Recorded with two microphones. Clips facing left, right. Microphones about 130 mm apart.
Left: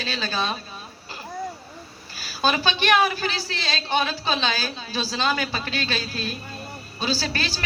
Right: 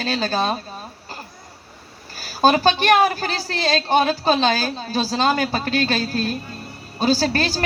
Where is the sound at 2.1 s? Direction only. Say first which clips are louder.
Right 7 dB; 45° right (ahead or behind).